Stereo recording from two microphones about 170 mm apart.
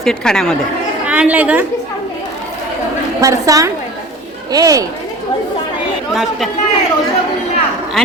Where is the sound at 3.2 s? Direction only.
20° right (ahead or behind).